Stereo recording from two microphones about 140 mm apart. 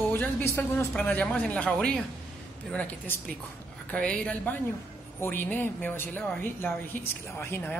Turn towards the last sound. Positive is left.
turn(degrees=15)  # may be behind; listen again after turning